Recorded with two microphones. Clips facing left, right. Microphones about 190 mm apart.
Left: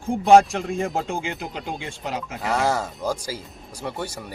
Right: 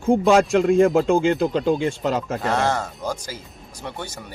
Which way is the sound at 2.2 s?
50° right (ahead or behind).